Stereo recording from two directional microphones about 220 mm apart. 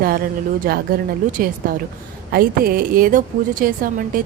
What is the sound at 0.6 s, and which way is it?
A woman's voice, 45° right (ahead or behind).